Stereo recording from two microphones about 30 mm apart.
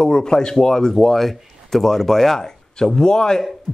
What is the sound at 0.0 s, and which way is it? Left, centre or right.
Speech, left.